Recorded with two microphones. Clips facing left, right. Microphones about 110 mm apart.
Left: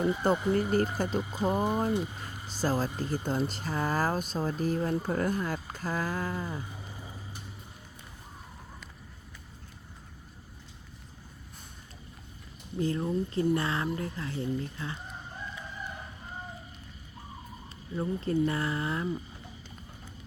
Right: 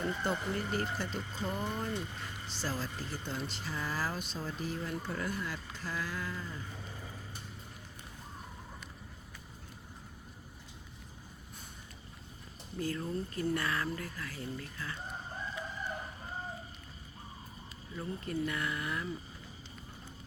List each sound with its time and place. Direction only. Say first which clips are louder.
0.2 s speech: left 8 dB; 45° left (ahead or behind)
1.2 s speech: left 9 dB; 10° left (ahead or behind)
2.2 s speech: left 8 dB; 45° left (ahead or behind)
6.6 s boat: left 2 dB; 15° left (ahead or behind)
12.8 s speech: left 7 dB; 30° left (ahead or behind)
17.9 s speech: left 8 dB; 30° left (ahead or behind)